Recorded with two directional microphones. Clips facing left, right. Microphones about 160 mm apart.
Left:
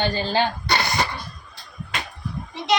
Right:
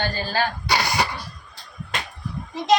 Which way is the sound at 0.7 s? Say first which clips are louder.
Even; 10° right (ahead or behind).